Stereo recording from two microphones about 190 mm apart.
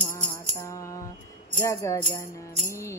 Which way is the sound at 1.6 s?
15° left (ahead or behind).